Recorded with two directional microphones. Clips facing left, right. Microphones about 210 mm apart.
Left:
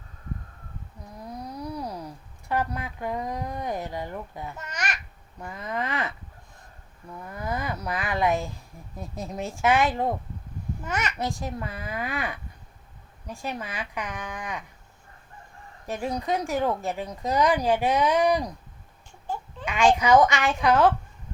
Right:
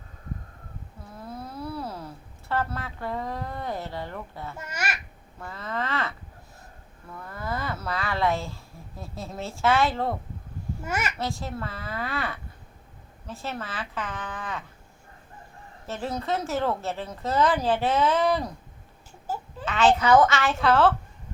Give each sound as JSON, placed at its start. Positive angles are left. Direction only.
{"t": 1.1, "sound": "a sound", "side_deg": 15}
{"t": 4.5, "sound": "a child's voice", "side_deg": -10}
{"t": 5.4, "sound": "speech", "side_deg": 15}
{"t": 10.8, "sound": "a child's voice", "side_deg": -10}
{"t": 11.2, "sound": "speech", "side_deg": 15}
{"t": 15.9, "sound": "speech", "side_deg": 15}
{"t": 19.3, "sound": "a sound", "side_deg": -5}
{"t": 19.6, "sound": "speech", "side_deg": 10}